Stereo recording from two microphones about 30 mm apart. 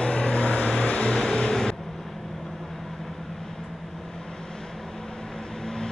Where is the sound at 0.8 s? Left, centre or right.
Left.